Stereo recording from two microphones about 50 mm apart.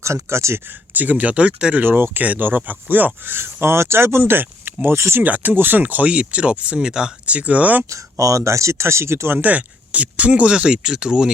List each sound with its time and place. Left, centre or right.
0.0 s speech: right
1.8 s speech: right
3.2 s speech: right
4.9 s speech: right
5.2 s speech: right
7.9 s speech: right
9.3 s speech: right; by 11.3 s centre